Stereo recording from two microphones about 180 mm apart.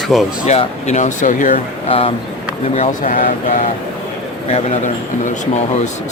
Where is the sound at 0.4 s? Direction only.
40° left (ahead or behind).